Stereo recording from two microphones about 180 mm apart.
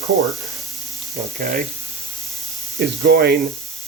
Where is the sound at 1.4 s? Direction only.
50° right (ahead or behind).